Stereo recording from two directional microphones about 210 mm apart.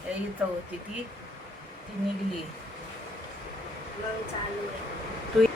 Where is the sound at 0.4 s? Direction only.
5° right (ahead or behind).